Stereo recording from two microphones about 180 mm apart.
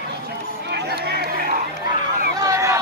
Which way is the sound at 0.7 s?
60° right (ahead or behind).